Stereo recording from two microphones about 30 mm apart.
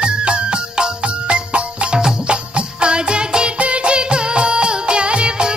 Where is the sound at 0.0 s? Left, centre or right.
Right.